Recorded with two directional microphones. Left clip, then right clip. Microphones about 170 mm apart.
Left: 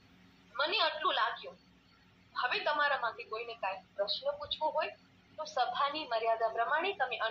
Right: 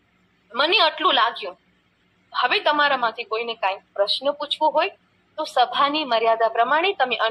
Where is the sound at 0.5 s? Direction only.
30° right (ahead or behind).